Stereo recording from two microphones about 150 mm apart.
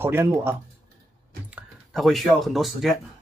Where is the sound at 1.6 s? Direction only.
Centre (ahead or behind).